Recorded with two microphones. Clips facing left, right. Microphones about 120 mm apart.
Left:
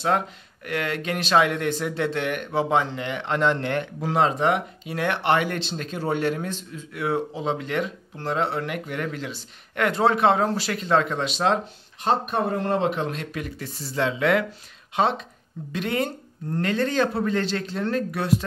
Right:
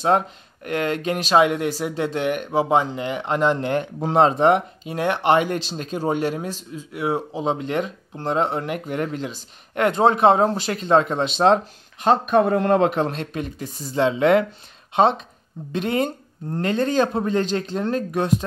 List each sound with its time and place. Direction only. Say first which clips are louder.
0.7 s speech: right 4 dB; 25° right (ahead or behind)
12.0 s speech: right 6 dB; 70° right (ahead or behind)
12.9 s speech: right 5 dB; 35° right (ahead or behind)
13.6 s speech: right 5 dB; 15° right (ahead or behind)